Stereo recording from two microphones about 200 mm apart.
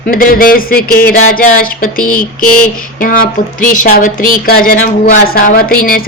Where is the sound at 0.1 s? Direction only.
45° left (ahead or behind).